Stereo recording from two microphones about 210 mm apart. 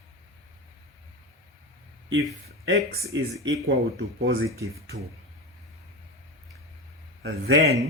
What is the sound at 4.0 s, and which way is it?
Speech, 50° right (ahead or behind).